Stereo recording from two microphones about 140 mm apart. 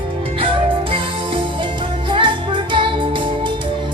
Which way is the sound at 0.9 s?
35° right (ahead or behind).